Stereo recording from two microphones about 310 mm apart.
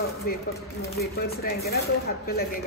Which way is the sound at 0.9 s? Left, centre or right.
Left.